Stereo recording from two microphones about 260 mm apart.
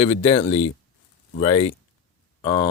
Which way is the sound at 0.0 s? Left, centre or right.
Centre.